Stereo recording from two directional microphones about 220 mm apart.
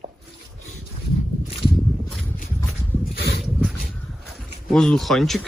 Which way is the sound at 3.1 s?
50° left (ahead or behind).